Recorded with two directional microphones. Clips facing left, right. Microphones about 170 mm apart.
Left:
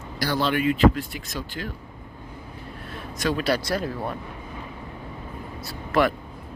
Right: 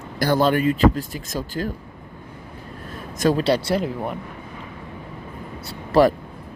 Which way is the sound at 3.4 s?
25° right (ahead or behind).